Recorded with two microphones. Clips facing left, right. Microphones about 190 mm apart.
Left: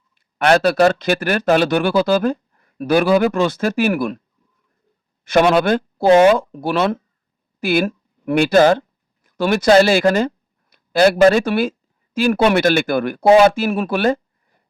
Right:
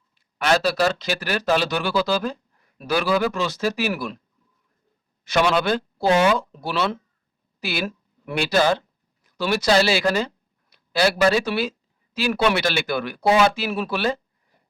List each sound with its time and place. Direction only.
0.1 s speech: 55° left (ahead or behind)
5.2 s speech: 55° left (ahead or behind)